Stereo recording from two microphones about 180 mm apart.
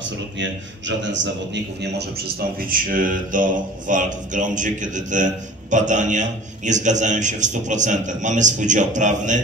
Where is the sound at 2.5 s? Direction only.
50° right (ahead or behind).